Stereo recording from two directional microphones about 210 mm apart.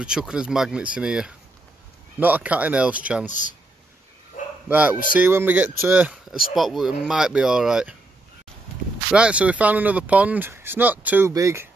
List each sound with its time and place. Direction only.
0.0 s speech: 5° right (ahead or behind)
3.3 s speech: 35° left (ahead or behind)
4.6 s speech: 5° right (ahead or behind)
9.1 s speech: 5° right (ahead or behind)